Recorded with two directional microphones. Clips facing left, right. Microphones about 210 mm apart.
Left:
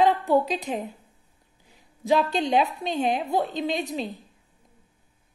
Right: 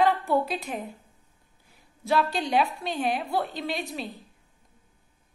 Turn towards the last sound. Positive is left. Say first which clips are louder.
# left 5 dB
turn(degrees=20)  # may be behind; listen again after turning